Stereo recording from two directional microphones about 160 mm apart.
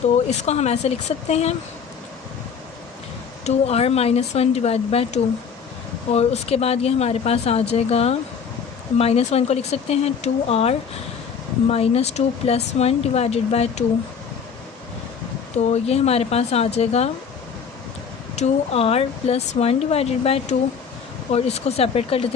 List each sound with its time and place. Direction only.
0.3 s speech: 45° left (ahead or behind)
3.4 s speech: 40° left (ahead or behind)
15.5 s speech: 40° left (ahead or behind)
18.3 s speech: 40° left (ahead or behind)